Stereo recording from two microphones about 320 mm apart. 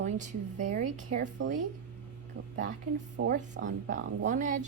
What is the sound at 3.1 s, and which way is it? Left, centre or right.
A woman's voice, right.